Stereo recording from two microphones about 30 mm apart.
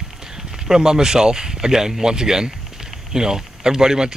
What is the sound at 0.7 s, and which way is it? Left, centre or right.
Speech, centre.